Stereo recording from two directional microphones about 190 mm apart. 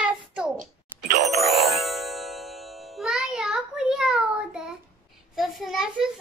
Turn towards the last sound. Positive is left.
turn(degrees=0)  # may be behind; listen again after turning